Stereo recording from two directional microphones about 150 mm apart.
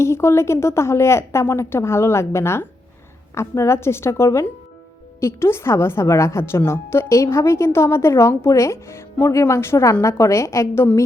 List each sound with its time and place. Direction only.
0.0 s a woman's voice: 20° left (ahead or behind)